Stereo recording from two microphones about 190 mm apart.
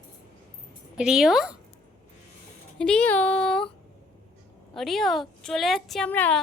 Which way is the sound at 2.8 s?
5° left (ahead or behind).